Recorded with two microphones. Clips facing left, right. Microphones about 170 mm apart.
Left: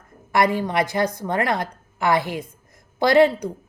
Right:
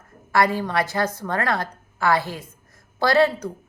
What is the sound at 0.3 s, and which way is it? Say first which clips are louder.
A woman's voice: left 1 dB; 20° left (ahead or behind).